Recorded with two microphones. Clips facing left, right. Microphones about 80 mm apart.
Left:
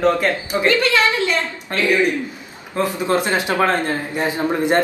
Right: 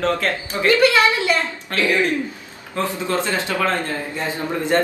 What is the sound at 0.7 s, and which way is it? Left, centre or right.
Speech, centre.